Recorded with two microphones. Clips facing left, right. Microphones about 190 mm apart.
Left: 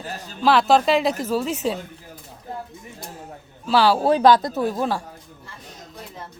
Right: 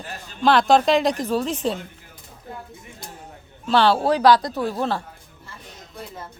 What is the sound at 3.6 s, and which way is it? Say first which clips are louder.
Speech: even; 5° left (ahead or behind).